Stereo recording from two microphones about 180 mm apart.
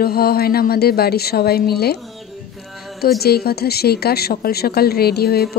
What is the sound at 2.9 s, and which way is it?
A woman's voice, 60° left (ahead or behind).